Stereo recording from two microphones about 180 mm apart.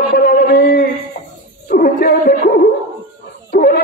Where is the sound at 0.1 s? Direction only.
60° left (ahead or behind).